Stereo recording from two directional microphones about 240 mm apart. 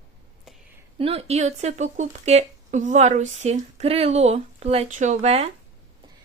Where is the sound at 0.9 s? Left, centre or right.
Right.